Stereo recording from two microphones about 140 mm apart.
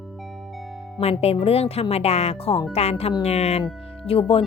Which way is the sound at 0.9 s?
35° left (ahead or behind).